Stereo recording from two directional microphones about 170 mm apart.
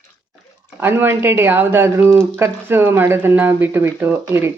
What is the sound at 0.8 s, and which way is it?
Speech, 10° right (ahead or behind).